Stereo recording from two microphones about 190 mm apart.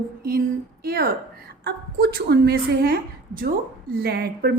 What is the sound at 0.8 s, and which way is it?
A woman's voice, 50° right (ahead or behind).